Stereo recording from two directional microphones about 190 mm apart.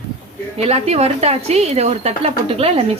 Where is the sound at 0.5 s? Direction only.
35° right (ahead or behind).